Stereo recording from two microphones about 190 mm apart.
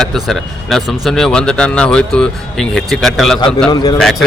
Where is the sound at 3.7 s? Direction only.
20° left (ahead or behind).